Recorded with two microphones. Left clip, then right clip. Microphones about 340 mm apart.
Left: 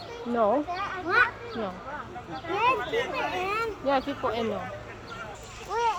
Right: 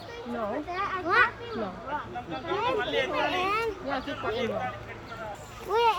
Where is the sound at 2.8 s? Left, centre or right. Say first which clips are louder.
Right 1 dB; right.